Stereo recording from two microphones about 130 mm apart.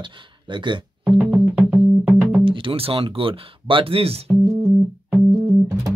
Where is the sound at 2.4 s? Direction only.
45° right (ahead or behind).